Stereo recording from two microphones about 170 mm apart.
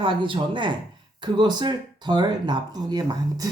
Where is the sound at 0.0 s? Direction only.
30° right (ahead or behind).